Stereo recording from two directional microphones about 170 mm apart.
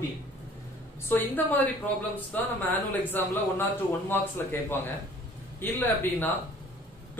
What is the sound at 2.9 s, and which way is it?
A man's voice, 10° left (ahead or behind).